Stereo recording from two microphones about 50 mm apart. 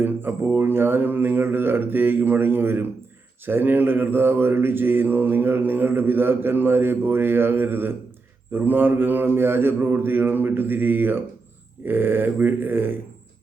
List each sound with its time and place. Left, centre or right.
0.0 s mantra: right